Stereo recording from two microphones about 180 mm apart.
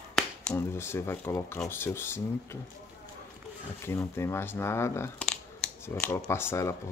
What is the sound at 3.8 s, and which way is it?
Speech, 15° left (ahead or behind).